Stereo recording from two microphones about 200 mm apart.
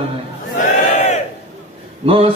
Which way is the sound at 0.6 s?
35° left (ahead or behind).